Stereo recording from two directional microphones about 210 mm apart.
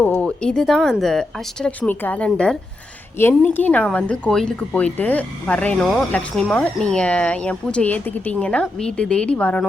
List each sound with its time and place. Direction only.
0.0 s speech: 5° left (ahead or behind)